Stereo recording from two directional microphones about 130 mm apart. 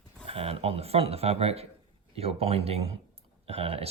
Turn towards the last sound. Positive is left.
turn(degrees=-50)  # may be behind; listen again after turning